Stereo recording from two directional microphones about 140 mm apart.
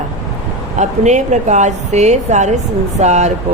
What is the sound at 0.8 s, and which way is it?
Speech, 55° right (ahead or behind).